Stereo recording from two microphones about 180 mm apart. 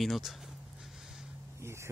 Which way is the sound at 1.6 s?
15° right (ahead or behind).